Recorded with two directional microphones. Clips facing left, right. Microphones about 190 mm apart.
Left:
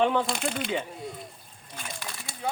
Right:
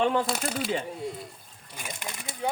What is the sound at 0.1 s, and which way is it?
Speech, centre (ahead or behind).